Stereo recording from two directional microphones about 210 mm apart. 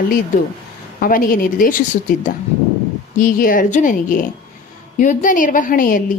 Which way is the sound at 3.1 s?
40° left (ahead or behind).